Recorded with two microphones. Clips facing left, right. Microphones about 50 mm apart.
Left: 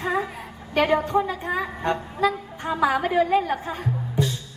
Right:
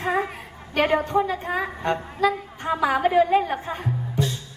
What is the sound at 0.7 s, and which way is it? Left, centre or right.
Speech, centre.